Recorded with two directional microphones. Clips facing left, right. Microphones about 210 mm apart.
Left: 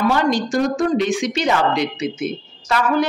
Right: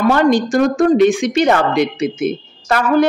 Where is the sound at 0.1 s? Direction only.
50° right (ahead or behind).